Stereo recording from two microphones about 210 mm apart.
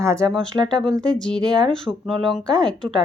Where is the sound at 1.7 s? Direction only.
Centre (ahead or behind).